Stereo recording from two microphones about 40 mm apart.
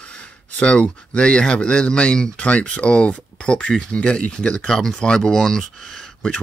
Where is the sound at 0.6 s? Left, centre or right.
Left.